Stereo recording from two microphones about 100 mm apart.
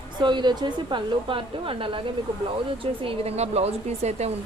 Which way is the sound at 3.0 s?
80° right.